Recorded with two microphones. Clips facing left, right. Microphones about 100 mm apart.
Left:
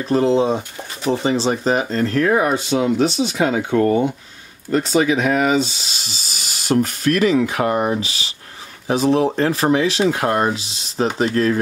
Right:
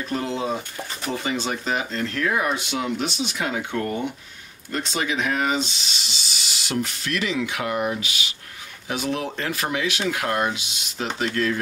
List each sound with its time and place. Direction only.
0.0 s speech: 30° left (ahead or behind)